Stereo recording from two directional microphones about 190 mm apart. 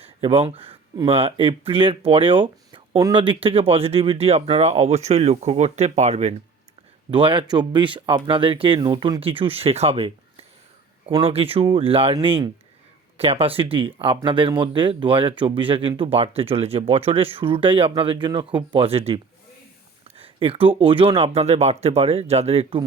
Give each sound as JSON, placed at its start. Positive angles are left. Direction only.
{"t": 0.0, "sound": "speech", "side_deg": -30}